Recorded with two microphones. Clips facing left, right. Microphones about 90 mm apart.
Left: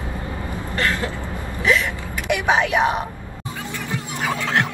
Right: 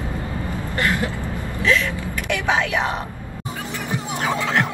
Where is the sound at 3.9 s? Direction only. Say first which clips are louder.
Right 2 dB; 20° right (ahead or behind).